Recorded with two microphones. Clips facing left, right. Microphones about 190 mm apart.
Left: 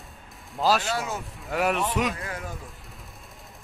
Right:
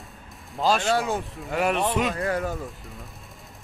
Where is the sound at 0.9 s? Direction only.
30° right (ahead or behind).